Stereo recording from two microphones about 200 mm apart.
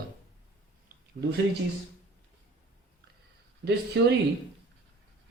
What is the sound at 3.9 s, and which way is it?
Speech, 60° right (ahead or behind).